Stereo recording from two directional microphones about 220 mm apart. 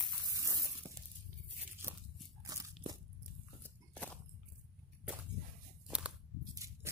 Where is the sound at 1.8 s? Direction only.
10° right (ahead or behind).